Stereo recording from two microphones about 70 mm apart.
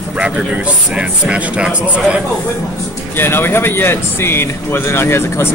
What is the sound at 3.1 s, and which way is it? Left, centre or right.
Speech, left.